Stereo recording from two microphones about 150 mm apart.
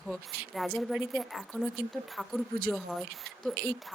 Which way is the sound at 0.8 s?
Centre (ahead or behind).